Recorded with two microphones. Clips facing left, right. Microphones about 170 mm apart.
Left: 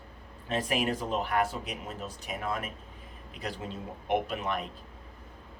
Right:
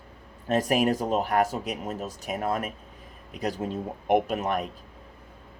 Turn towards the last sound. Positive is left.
turn(degrees=-45)  # may be behind; listen again after turning